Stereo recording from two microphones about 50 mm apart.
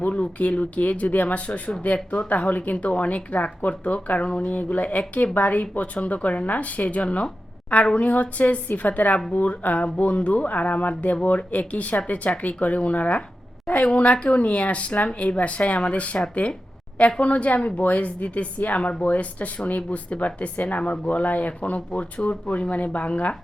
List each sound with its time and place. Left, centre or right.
0.0 s a woman's voice: left